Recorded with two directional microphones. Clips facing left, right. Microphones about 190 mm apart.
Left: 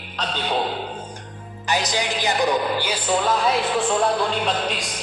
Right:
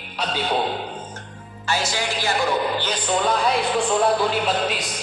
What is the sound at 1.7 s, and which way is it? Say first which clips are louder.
Speech: left 1 dB; 15° left (ahead or behind).